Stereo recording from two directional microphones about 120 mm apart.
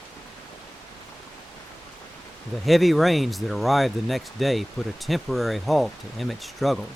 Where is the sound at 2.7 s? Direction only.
Centre (ahead or behind).